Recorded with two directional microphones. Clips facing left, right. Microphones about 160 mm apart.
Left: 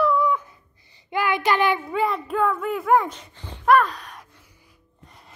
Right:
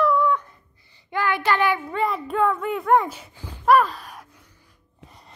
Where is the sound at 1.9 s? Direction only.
Centre (ahead or behind).